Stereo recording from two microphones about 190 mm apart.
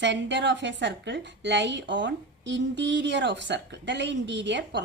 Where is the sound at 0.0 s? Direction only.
70° right (ahead or behind).